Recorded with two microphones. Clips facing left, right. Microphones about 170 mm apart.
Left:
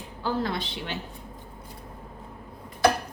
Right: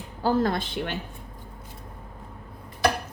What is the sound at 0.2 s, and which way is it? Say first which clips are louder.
Speech: right 5 dB; 45° right (ahead or behind).